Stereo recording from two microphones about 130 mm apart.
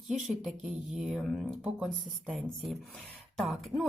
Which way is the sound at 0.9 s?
Centre (ahead or behind).